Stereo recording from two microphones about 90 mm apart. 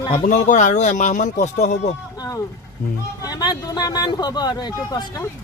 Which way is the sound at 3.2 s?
45° left (ahead or behind).